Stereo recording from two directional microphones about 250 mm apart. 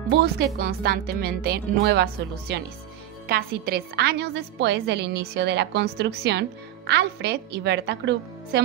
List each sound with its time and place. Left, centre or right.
0.1 s a woman's voice: right